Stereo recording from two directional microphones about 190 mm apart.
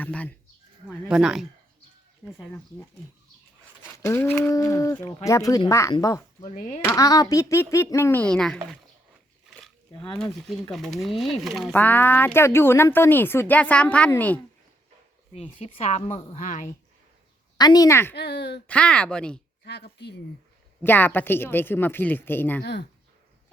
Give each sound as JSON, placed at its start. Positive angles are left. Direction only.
{"t": 0.0, "sound": "speech", "side_deg": 10}
{"t": 1.0, "sound": "speech", "side_deg": -5}
{"t": 2.2, "sound": "speech", "side_deg": 10}
{"t": 3.9, "sound": "speech", "side_deg": 15}
{"t": 6.5, "sound": "a woman's voice", "side_deg": 35}
{"t": 6.8, "sound": "speech", "side_deg": 15}
{"t": 10.7, "sound": "speech", "side_deg": 0}
{"t": 15.4, "sound": "a woman's voice", "side_deg": 30}
{"t": 17.6, "sound": "speech", "side_deg": 20}
{"t": 18.1, "sound": "speech", "side_deg": 60}
{"t": 18.7, "sound": "speech", "side_deg": 5}
{"t": 19.6, "sound": "speech", "side_deg": 60}
{"t": 20.8, "sound": "speech", "side_deg": 10}
{"t": 22.6, "sound": "speech", "side_deg": 60}